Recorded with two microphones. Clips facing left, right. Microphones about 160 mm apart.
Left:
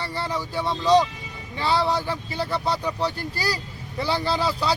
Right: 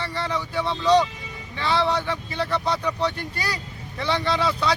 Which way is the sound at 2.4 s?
5° left (ahead or behind).